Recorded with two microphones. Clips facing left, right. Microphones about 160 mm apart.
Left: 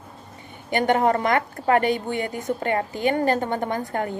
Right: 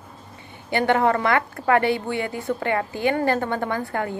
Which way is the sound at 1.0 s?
40° left (ahead or behind).